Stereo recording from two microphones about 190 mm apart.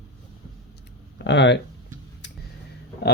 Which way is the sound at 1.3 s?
70° left (ahead or behind).